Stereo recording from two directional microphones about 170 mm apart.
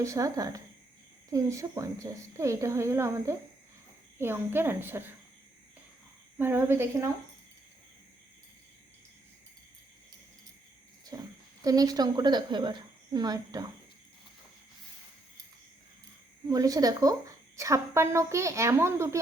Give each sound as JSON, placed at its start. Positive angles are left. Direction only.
{"t": 0.0, "sound": "a woman's voice", "side_deg": -20}
{"t": 6.4, "sound": "a woman's voice", "side_deg": -10}
{"t": 11.1, "sound": "a sound", "side_deg": -20}
{"t": 11.6, "sound": "a woman's voice", "side_deg": -20}
{"t": 16.5, "sound": "a woman's voice", "side_deg": -20}